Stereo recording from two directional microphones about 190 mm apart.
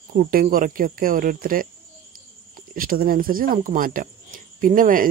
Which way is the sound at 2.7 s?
50° right (ahead or behind).